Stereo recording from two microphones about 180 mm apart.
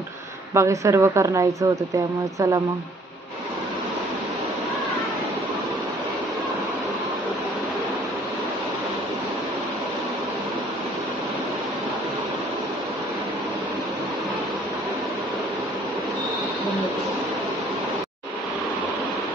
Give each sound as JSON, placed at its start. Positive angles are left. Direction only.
{"t": 0.6, "sound": "a woman's voice", "side_deg": -15}